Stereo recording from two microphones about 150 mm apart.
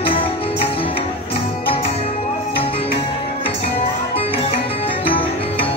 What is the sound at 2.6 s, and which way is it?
Music, 40° left (ahead or behind).